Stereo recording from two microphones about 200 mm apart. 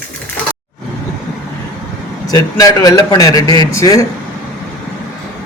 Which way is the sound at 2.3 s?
20° left (ahead or behind).